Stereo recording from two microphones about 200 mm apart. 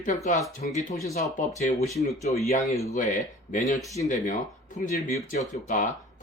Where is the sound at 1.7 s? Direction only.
15° left (ahead or behind).